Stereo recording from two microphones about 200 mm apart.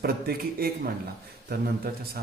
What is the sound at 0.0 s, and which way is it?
A man's voice, 50° right (ahead or behind).